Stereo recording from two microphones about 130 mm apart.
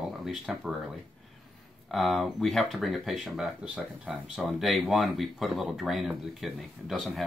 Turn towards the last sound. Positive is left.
turn(degrees=0)  # may be behind; listen again after turning